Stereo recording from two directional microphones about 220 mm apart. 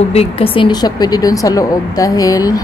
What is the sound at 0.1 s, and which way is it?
Speech, 25° left (ahead or behind).